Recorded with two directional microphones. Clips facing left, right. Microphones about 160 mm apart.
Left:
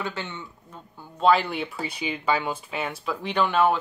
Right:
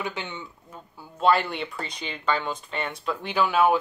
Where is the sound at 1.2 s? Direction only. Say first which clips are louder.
Left 1 dB; centre (ahead or behind).